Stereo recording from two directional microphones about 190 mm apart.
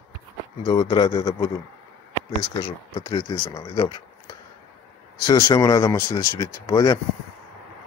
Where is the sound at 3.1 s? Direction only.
20° left (ahead or behind).